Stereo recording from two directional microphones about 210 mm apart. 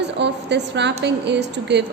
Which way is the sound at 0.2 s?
55° right (ahead or behind).